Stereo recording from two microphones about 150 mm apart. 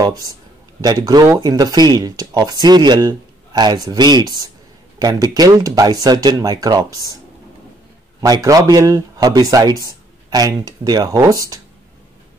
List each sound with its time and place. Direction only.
0.7 s speech: 25° right (ahead or behind)
8.2 s speech: 25° right (ahead or behind)